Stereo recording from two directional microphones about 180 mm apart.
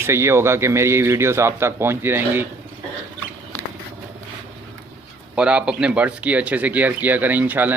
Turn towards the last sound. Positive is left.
turn(degrees=-10)  # may be behind; listen again after turning